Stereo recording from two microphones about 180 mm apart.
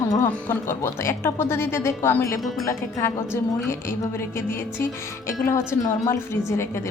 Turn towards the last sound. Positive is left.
turn(degrees=15)  # may be behind; listen again after turning